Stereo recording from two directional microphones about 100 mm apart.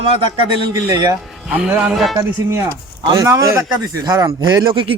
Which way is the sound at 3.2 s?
30° right (ahead or behind).